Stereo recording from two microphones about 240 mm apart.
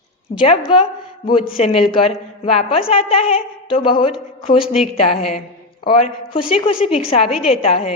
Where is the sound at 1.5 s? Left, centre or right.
Left.